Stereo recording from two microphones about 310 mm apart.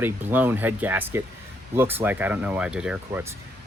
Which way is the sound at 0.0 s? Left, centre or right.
Centre.